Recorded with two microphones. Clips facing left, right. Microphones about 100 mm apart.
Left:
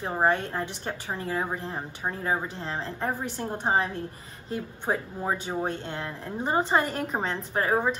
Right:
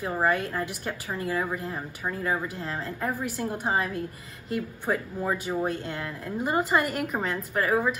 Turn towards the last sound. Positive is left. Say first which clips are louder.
# even
turn(degrees=30)  # may be behind; listen again after turning